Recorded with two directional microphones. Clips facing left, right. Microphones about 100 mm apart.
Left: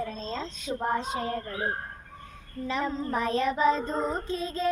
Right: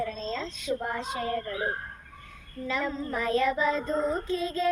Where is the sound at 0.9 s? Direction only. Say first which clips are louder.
Left 1 dB; 25° left (ahead or behind).